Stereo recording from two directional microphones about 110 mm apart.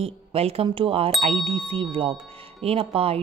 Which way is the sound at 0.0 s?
70° right (ahead or behind).